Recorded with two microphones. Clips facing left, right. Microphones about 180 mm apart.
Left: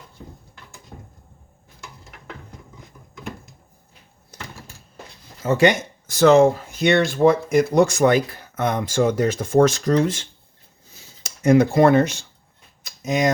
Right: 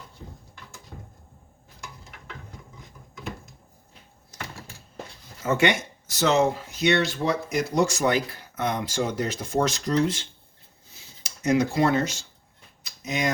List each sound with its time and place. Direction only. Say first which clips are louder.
5.5 s speech: left 6 dB; 35° left (ahead or behind)
6.1 s speech: left 8 dB; 50° left (ahead or behind)
12.8 s a sound: left 7 dB; 45° left (ahead or behind)